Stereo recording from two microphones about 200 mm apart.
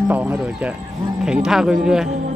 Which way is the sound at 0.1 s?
10° right (ahead or behind).